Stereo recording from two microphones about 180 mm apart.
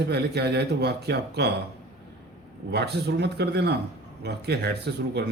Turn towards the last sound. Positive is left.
turn(degrees=-65)  # may be behind; listen again after turning